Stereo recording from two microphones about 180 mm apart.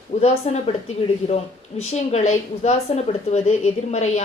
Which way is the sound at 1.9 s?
35° left (ahead or behind).